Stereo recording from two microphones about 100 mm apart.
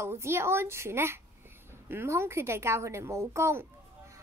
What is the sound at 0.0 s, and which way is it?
A woman's voice, 25° right (ahead or behind).